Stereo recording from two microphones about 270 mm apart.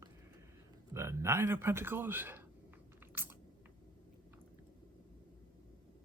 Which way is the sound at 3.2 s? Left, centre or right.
Centre.